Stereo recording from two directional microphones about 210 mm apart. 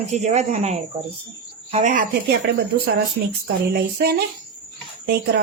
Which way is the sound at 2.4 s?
50° right (ahead or behind).